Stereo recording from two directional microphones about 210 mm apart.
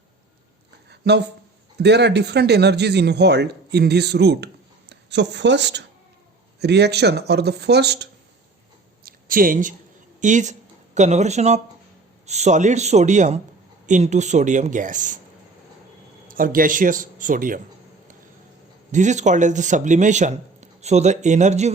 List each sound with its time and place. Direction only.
0.9 s a sound: 55° right (ahead or behind)
1.8 s a man's voice: 55° right (ahead or behind)
9.0 s speech: 40° right (ahead or behind)
16.3 s speech: 40° right (ahead or behind)
18.9 s speech: 35° right (ahead or behind)